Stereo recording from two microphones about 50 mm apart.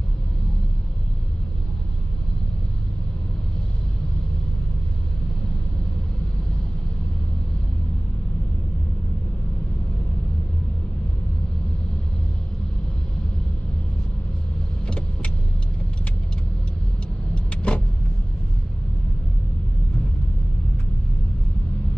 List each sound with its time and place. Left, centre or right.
14.9 s vehicle: left
17.3 s vehicle: left